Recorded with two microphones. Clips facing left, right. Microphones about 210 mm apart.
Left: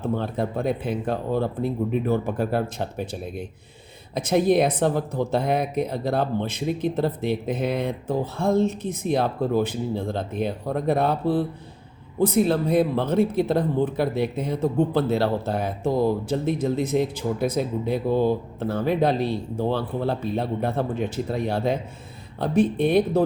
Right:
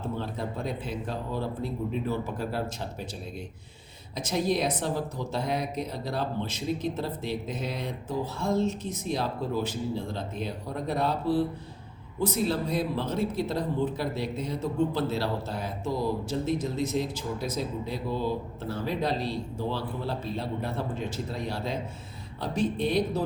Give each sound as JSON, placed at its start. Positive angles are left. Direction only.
{"t": 0.2, "sound": "speech", "side_deg": 55}